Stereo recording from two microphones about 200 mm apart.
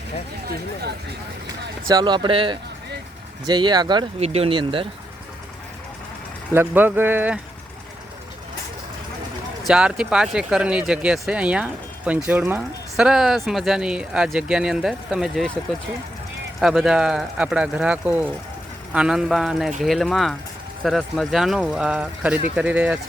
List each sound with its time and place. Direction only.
0.4 s speech: 55° right (ahead or behind)
1.9 s speech: 20° right (ahead or behind)
6.5 s speech: 10° right (ahead or behind)
9.6 s speech: 5° right (ahead or behind)
16.6 s speech: centre (ahead or behind)